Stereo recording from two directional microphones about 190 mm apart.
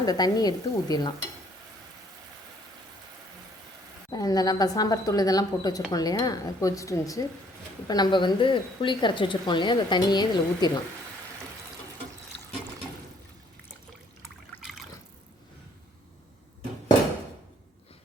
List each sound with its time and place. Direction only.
0.0 s a woman's voice: 20° left (ahead or behind)
4.1 s a woman's voice: 20° left (ahead or behind)